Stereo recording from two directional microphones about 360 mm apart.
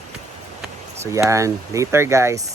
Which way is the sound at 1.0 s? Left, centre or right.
Centre.